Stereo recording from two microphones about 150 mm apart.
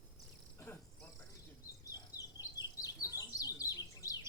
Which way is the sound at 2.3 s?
25° left (ahead or behind).